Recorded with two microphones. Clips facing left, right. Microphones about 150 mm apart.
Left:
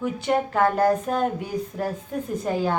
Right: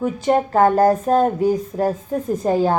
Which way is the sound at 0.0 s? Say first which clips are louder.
Right 5 dB; 40° right (ahead or behind).